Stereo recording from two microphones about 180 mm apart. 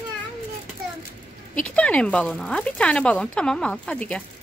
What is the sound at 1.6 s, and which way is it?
Speech, 5° left (ahead or behind).